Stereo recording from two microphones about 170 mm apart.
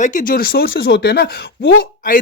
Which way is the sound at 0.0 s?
50° left (ahead or behind).